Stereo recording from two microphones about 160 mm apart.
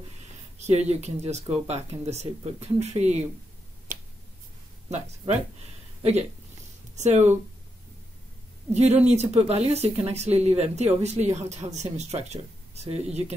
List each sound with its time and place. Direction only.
0.6 s speech: 45° right (ahead or behind)
4.8 s speech: 45° right (ahead or behind)
7.0 s speech: 45° right (ahead or behind)
8.7 s speech: 40° right (ahead or behind)